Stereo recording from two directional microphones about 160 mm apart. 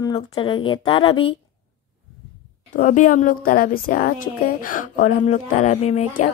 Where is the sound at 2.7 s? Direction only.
55° left (ahead or behind).